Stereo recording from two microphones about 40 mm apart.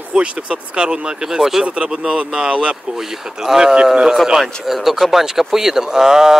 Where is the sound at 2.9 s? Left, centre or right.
Centre.